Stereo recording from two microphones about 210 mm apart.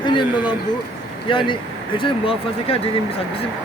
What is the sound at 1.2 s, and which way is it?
Speech, 25° left (ahead or behind).